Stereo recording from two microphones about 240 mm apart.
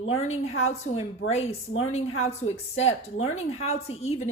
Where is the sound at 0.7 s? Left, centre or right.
Left.